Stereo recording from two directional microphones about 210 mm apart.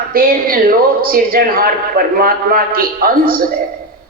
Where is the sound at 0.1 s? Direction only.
45° right (ahead or behind).